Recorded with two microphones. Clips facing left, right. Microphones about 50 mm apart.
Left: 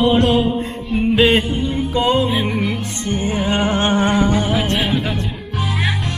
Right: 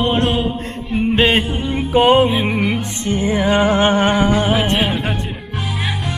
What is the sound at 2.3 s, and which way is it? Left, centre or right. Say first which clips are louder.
Music: right 2 dB; centre.